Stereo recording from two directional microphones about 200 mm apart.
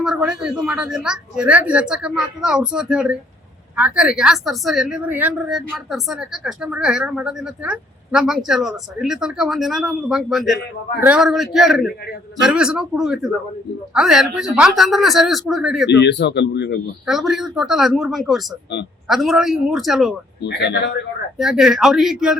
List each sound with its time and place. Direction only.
0.0 s a woman's voice: 5° right (ahead or behind)
15.9 s speech: 60° left (ahead or behind)
17.1 s a woman's voice: centre (ahead or behind)
20.4 s speech: 60° left (ahead or behind)
21.3 s a woman's voice: centre (ahead or behind)